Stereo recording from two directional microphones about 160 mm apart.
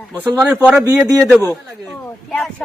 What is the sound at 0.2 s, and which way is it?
Speech, 10° right (ahead or behind).